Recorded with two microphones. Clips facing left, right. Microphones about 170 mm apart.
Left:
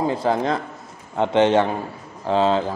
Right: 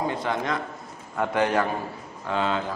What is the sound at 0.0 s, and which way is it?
A man's voice, 30° left (ahead or behind).